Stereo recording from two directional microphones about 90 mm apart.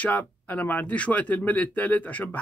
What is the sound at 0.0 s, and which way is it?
Speech, 20° left (ahead or behind).